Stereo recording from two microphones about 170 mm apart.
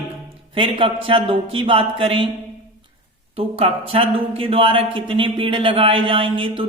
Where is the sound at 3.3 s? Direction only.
35° right (ahead or behind).